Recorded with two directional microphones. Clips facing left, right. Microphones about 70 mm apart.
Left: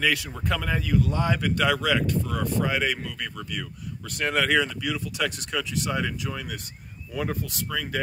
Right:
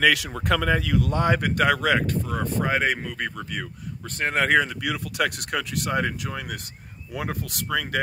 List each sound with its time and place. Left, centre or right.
0.0 s speech: right
1.1 s speech: right
2.2 s speech: right